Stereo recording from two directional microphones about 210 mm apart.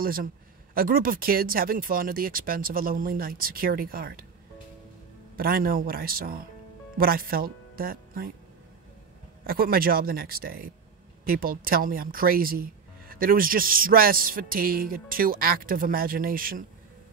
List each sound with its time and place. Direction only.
0.0 s speech: 45° right (ahead or behind)
5.3 s speech: 45° right (ahead or behind)
9.5 s speech: 45° right (ahead or behind)